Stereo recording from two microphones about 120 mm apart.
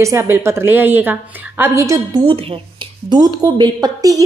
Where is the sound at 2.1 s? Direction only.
45° right (ahead or behind).